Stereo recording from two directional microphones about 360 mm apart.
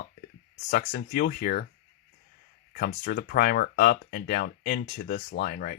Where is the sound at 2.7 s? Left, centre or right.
Left.